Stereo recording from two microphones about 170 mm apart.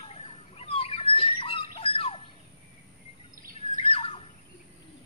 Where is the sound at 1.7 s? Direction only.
35° left (ahead or behind).